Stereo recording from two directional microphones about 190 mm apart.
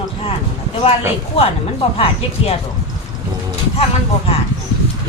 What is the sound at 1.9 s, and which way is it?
Speech, 30° left (ahead or behind).